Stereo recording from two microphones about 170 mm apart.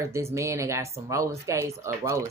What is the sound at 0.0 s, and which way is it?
A man's voice, 15° right (ahead or behind).